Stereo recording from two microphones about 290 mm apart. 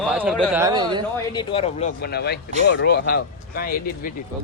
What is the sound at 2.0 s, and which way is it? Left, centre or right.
Speech, left.